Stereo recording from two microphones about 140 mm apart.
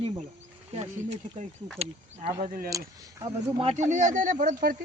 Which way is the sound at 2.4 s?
90° right.